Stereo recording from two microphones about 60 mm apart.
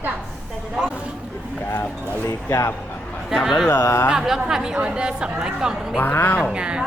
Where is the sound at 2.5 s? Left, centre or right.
Left.